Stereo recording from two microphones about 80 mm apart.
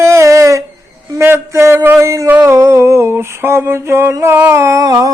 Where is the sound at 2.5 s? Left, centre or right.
Right.